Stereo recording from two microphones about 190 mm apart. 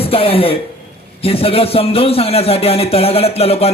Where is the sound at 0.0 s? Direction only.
30° left (ahead or behind).